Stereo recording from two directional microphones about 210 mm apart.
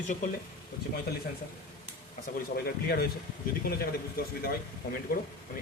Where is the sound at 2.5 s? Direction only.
45° left (ahead or behind).